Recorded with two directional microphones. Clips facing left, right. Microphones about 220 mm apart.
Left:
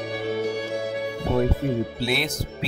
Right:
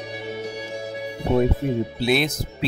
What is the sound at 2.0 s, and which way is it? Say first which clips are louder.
Speech: right 5 dB; 20° right (ahead or behind).